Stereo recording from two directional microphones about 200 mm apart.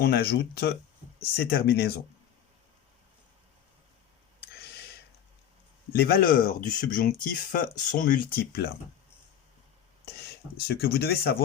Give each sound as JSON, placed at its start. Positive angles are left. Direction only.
{"t": 0.0, "sound": "speech", "side_deg": 50}
{"t": 6.0, "sound": "speech", "side_deg": 45}
{"t": 10.7, "sound": "speech", "side_deg": 50}